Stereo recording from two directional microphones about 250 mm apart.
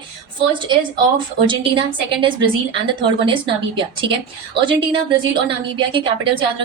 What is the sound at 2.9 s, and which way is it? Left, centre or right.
Speech, centre.